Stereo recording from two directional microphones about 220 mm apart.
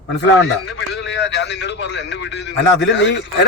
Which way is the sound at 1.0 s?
50° left (ahead or behind).